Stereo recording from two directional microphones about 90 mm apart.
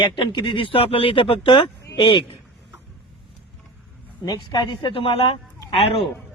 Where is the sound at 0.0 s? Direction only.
60° left (ahead or behind).